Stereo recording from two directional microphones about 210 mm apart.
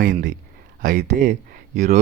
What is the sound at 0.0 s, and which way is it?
Speech, 40° right (ahead or behind).